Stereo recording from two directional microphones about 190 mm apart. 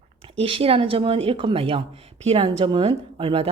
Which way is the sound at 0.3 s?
30° right (ahead or behind).